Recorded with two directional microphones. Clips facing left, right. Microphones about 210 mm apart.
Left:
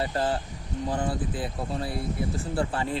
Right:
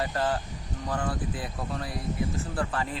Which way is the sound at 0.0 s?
25° left (ahead or behind).